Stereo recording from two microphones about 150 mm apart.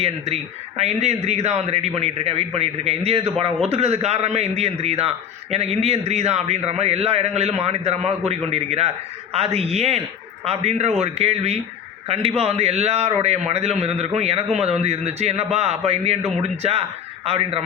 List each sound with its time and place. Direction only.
0.8 s a man's voice: 50° right (ahead or behind)